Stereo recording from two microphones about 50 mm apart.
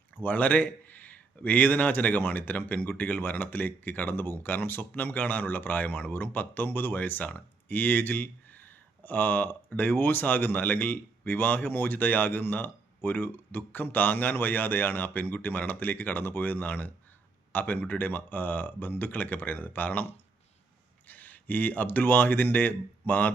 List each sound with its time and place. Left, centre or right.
0.2 s a man's voice: left